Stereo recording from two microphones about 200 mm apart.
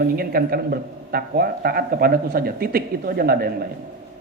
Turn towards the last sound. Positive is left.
turn(degrees=-50)  # may be behind; listen again after turning